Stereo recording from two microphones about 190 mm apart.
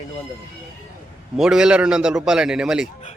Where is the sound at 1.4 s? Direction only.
5° right (ahead or behind).